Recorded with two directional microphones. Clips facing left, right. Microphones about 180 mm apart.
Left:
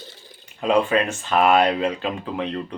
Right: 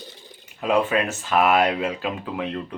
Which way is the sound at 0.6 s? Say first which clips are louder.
Left 2 dB; 5° right (ahead or behind).